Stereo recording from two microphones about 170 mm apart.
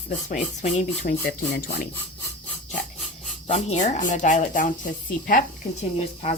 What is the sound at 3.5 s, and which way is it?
Speech, 40° left (ahead or behind).